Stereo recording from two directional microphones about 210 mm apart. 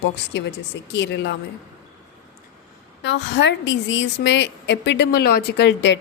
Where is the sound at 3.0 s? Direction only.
55° left (ahead or behind).